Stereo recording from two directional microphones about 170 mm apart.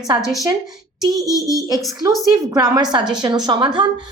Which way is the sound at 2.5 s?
25° right (ahead or behind).